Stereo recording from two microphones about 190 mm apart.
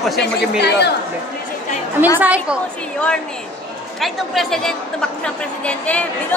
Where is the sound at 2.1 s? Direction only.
10° right (ahead or behind).